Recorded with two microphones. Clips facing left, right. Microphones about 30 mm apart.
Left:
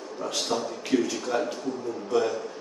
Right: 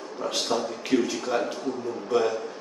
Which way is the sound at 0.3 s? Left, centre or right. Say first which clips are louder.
Right 2 dB; centre.